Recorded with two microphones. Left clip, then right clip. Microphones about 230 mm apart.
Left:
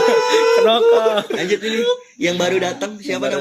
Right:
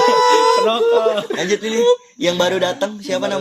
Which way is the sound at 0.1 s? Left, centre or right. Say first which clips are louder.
Right 2 dB; right.